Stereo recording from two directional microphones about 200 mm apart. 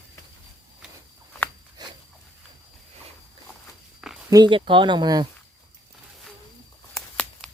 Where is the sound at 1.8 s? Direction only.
20° right (ahead or behind).